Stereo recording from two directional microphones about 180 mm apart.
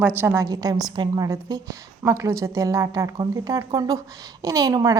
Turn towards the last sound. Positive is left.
turn(degrees=-20)  # may be behind; listen again after turning